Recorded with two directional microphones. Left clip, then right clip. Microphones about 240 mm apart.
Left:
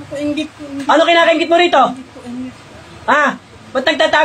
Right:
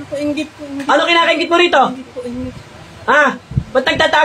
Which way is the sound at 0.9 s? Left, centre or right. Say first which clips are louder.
Left 2 dB; centre.